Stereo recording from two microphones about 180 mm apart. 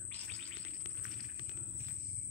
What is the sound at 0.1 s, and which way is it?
Music, 5° left (ahead or behind).